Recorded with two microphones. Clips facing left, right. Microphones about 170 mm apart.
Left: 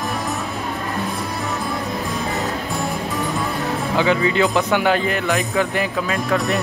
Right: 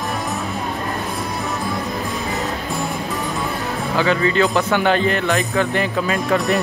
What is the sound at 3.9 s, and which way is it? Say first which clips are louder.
Speech: right 1 dB; 15° left (ahead or behind).